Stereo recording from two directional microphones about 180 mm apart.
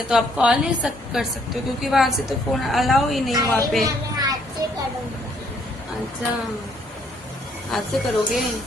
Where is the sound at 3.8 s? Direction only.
20° right (ahead or behind).